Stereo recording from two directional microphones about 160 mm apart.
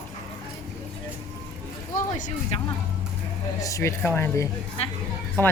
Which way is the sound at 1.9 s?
50° left (ahead or behind).